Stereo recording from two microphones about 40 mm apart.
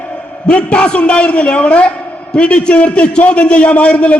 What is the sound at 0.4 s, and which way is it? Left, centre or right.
A man's voice, left.